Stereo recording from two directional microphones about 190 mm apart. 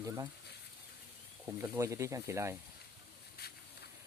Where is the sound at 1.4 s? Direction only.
15° right (ahead or behind).